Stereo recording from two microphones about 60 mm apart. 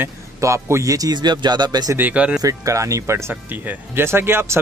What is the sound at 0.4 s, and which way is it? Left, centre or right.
Speech, right.